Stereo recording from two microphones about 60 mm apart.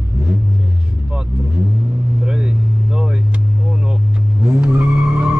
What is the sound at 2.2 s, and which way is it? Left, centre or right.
Vehicle, centre.